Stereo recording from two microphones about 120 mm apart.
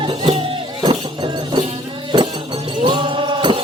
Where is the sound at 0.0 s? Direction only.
50° right (ahead or behind).